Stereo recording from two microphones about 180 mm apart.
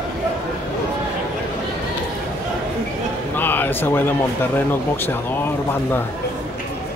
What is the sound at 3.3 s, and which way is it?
A man's voice, 10° left (ahead or behind).